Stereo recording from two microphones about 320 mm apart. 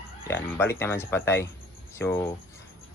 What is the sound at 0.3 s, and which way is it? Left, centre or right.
Speech, centre.